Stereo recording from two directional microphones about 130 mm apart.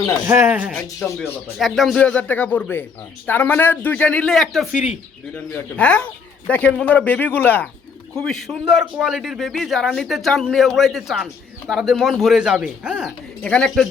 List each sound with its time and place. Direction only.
0.3 s speech: 20° right (ahead or behind)
1.0 s speech: 15° left (ahead or behind)
1.5 s speech: centre (ahead or behind)
5.5 s speech: 10° left (ahead or behind)
8.1 s a man's voice: 5° left (ahead or behind)
13.4 s a man's voice: 5° left (ahead or behind)